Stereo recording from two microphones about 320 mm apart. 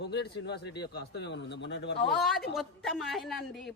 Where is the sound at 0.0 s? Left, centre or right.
Left.